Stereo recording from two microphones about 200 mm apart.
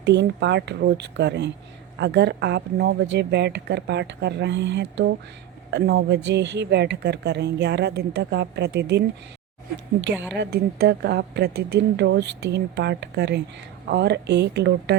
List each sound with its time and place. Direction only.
0.0 s a woman's voice: 60° right (ahead or behind)